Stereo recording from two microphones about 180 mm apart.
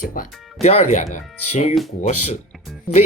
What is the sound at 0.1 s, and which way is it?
Speech, 50° left (ahead or behind).